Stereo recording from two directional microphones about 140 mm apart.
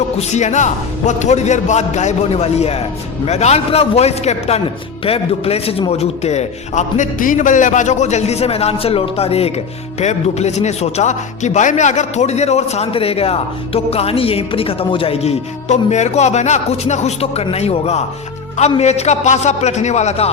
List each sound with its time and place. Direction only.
0.2 s a man's voice: 60° left (ahead or behind)